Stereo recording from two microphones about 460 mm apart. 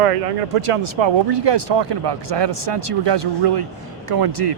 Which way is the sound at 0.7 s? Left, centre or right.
Right.